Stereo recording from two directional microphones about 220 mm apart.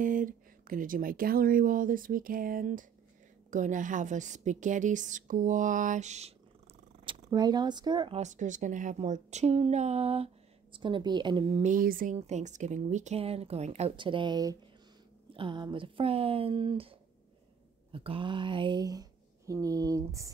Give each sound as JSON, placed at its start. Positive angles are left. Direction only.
{"t": 0.0, "sound": "speech", "side_deg": -35}
{"t": 7.1, "sound": "speech", "side_deg": -20}
{"t": 11.6, "sound": "speech", "side_deg": -40}